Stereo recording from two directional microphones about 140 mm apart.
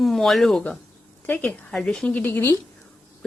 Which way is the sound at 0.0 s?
Centre (ahead or behind).